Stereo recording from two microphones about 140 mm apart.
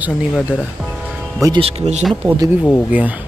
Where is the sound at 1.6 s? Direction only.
50° right (ahead or behind).